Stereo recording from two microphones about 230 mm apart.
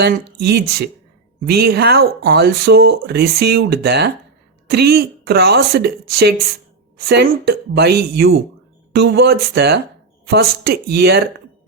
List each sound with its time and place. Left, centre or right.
0.0 s speech: right